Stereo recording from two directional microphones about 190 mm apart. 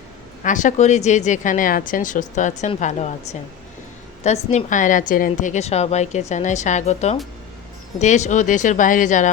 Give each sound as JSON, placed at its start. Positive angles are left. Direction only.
{"t": 0.4, "sound": "a woman's voice", "side_deg": 40}
{"t": 4.2, "sound": "a woman's voice", "side_deg": 40}